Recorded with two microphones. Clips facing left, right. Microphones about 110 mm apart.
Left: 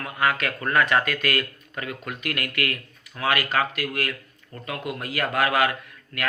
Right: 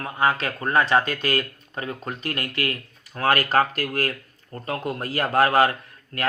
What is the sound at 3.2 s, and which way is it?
A man's voice, 40° right (ahead or behind).